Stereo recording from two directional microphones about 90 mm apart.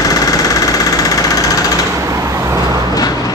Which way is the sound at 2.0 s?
35° right (ahead or behind).